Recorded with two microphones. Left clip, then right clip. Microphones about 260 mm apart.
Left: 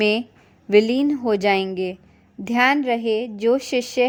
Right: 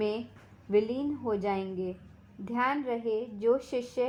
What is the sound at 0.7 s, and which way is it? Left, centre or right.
A woman's voice, left.